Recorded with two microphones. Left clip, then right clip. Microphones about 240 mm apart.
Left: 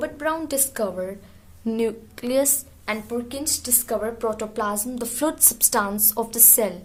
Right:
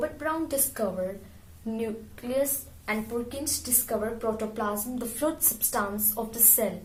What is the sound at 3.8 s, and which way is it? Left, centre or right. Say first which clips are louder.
A woman's voice: left 4 dB; left.